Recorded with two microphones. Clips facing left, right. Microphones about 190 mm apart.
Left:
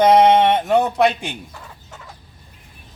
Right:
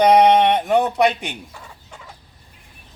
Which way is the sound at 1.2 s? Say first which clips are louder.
Left 1 dB; 10° right (ahead or behind).